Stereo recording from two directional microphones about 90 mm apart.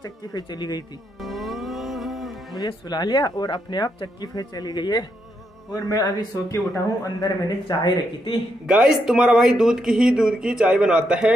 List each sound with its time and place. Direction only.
0.0 s speech: 50° left (ahead or behind)
1.2 s music: centre (ahead or behind)
2.5 s speech: 50° left (ahead or behind)
8.6 s speech: 5° right (ahead or behind)